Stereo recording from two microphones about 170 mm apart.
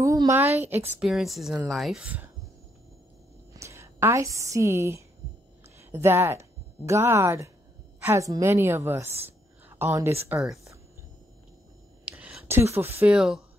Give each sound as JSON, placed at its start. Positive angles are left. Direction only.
{"t": 0.0, "sound": "a sound", "side_deg": -20}
{"t": 0.7, "sound": "speech", "side_deg": -10}
{"t": 1.0, "sound": "speech", "side_deg": 0}
{"t": 3.5, "sound": "a woman's voice", "side_deg": -15}
{"t": 10.4, "sound": "speech", "side_deg": 0}
{"t": 12.0, "sound": "speech", "side_deg": -5}